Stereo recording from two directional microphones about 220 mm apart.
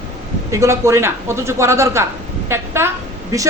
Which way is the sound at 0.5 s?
15° right (ahead or behind).